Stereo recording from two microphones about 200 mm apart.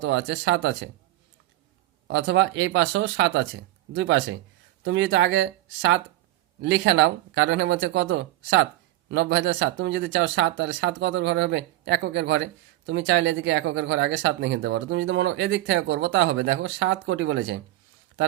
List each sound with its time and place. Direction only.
0.0 s speech: 65° right (ahead or behind)
2.0 s speech: 70° right (ahead or behind)